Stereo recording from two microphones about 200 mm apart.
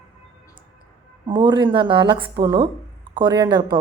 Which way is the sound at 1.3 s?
20° right (ahead or behind).